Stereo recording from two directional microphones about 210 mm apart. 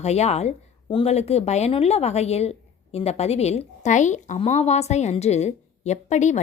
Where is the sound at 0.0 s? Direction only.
30° left (ahead or behind).